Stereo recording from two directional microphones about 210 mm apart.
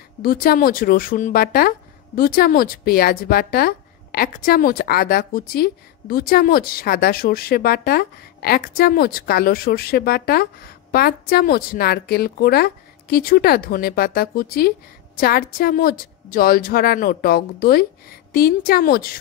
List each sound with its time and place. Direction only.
0.2 s a woman's voice: 45° left (ahead or behind)